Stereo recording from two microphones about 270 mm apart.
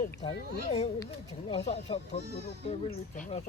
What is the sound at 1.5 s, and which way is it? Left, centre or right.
Speech, centre.